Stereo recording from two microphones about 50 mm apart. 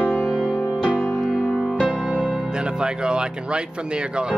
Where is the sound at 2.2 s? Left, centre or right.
Centre.